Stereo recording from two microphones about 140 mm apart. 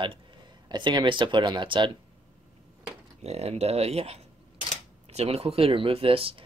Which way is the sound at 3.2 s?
50° right (ahead or behind).